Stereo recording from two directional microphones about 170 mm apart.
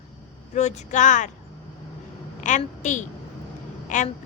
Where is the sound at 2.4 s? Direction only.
45° left (ahead or behind).